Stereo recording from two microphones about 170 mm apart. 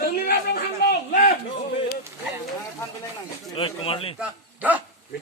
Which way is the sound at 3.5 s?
30° left (ahead or behind).